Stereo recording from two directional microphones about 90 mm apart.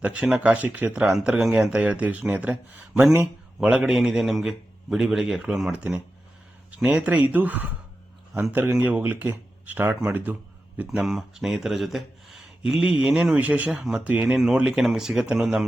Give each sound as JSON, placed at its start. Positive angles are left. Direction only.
{"t": 0.0, "sound": "speech", "side_deg": -15}
{"t": 3.8, "sound": "a man's voice", "side_deg": -5}
{"t": 10.8, "sound": "speech", "side_deg": -5}
{"t": 14.3, "sound": "speech", "side_deg": -5}